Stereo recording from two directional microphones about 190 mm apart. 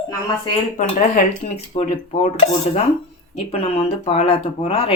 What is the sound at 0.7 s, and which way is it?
Speech, 40° left (ahead or behind).